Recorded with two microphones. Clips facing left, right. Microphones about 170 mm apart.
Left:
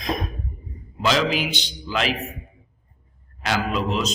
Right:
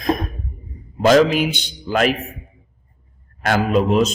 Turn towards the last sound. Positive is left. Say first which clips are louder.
# right 8 dB
turn(degrees=-50)  # may be behind; listen again after turning